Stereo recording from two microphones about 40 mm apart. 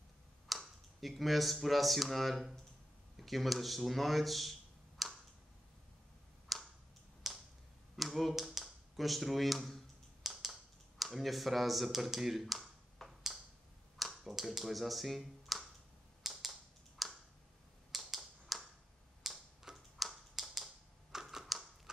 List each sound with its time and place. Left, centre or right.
0.5 s speech: centre
6.5 s tick: centre
7.2 s computer keyboard: centre
7.9 s speech: centre
8.5 s a sound: centre
8.9 s speech: centre
10.2 s computer keyboard: centre
13.9 s finger snapping: centre
16.2 s typewriter: centre
17.0 s a sound: centre
17.9 s computer keyboard: centre
19.2 s a sound: centre
20.0 s tap: centre
20.3 s typing: centre